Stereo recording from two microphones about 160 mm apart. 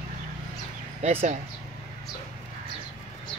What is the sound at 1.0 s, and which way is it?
Speech, 40° right (ahead or behind).